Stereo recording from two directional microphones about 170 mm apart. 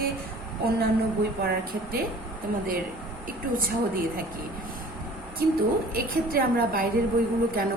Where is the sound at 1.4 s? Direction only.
60° right (ahead or behind).